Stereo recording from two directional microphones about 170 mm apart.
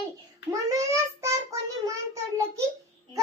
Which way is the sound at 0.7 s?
20° right (ahead or behind).